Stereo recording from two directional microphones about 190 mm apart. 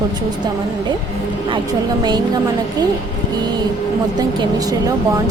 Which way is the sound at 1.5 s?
20° right (ahead or behind).